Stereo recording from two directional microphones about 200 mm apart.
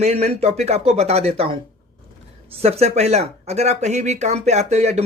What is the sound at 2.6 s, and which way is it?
A man's voice, 30° right (ahead or behind).